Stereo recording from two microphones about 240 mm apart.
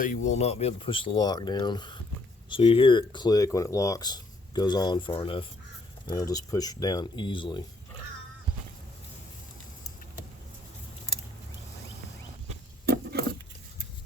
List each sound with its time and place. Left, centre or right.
0.3 s speech: left
12.8 s patter: right